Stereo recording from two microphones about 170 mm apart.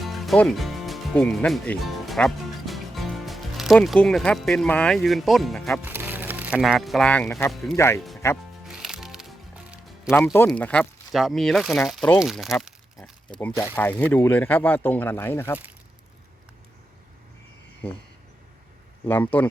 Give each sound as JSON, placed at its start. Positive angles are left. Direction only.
{"t": 0.0, "sound": "speech", "side_deg": 0}
{"t": 5.8, "sound": "speech", "side_deg": -10}
{"t": 7.5, "sound": "speech", "side_deg": 0}
{"t": 7.8, "sound": "speech", "side_deg": 15}
{"t": 8.6, "sound": "music", "side_deg": -5}
{"t": 10.3, "sound": "speech", "side_deg": 10}
{"t": 13.3, "sound": "speech", "side_deg": 10}
{"t": 17.8, "sound": "speech", "side_deg": 35}
{"t": 19.0, "sound": "speech", "side_deg": 10}